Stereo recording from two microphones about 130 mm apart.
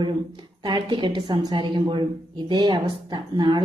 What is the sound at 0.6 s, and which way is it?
A woman's voice, 35° right (ahead or behind).